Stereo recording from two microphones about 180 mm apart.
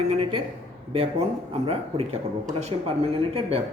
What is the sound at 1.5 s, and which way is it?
Speech, 35° right (ahead or behind).